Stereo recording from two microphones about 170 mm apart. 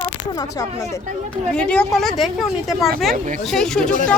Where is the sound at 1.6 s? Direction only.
5° left (ahead or behind).